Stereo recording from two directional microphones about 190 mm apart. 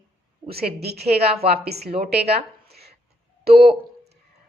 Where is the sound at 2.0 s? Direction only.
60° right (ahead or behind).